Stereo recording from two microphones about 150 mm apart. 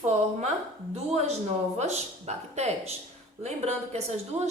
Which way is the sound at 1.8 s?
50° right (ahead or behind).